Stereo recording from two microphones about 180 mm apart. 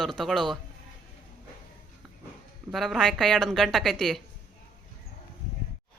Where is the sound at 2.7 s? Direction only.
Centre (ahead or behind).